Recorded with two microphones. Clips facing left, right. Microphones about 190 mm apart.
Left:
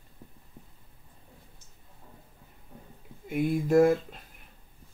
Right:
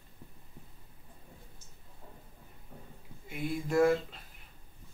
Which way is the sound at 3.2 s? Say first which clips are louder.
Left 8 dB; 50° left (ahead or behind).